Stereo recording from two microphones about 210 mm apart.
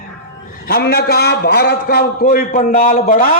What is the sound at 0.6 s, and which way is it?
Speech, 45° left (ahead or behind).